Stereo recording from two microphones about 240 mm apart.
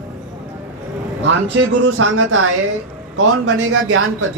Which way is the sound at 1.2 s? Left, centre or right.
Right.